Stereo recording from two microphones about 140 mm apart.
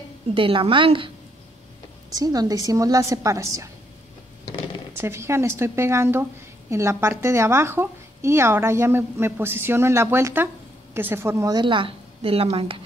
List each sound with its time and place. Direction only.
0.3 s a woman's voice: 40° right (ahead or behind)
2.1 s a woman's voice: 25° right (ahead or behind)
4.9 s a woman's voice: 20° right (ahead or behind)
11.5 s a woman's voice: 35° right (ahead or behind)